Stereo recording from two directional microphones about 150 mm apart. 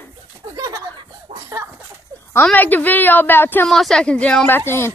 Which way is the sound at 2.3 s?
10° left (ahead or behind).